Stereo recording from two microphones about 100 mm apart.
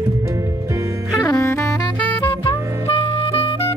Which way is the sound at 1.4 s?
30° left (ahead or behind).